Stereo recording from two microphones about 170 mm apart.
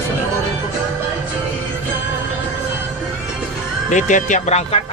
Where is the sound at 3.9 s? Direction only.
45° left (ahead or behind).